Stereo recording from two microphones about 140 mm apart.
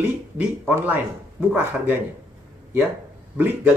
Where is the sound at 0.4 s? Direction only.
10° right (ahead or behind).